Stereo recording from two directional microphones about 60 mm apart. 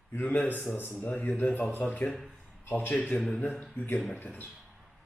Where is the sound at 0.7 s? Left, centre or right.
Centre.